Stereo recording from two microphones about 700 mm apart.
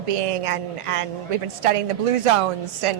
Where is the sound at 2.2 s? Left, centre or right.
Right.